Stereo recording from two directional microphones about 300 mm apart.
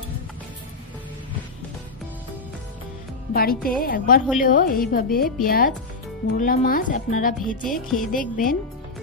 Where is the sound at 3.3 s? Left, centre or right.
Left.